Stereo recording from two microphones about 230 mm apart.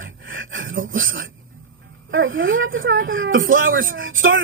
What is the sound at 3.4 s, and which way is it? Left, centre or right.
Speech, right.